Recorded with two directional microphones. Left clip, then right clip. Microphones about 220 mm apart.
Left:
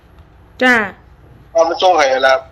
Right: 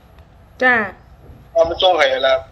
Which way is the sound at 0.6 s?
40° left (ahead or behind).